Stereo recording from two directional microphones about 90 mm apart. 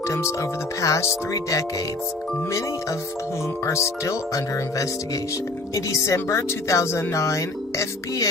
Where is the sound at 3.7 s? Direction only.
35° left (ahead or behind).